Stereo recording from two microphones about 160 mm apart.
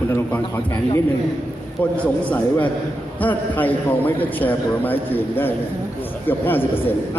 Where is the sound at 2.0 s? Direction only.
10° left (ahead or behind).